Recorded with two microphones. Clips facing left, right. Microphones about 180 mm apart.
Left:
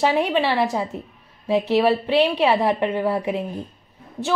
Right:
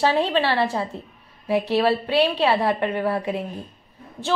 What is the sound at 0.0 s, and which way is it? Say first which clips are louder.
A woman's voice: left 1 dB; 15° left (ahead or behind).